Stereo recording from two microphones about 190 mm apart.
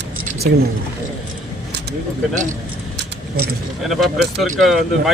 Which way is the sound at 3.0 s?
55° right (ahead or behind).